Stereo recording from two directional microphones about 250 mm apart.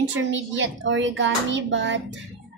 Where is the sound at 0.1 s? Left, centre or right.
Right.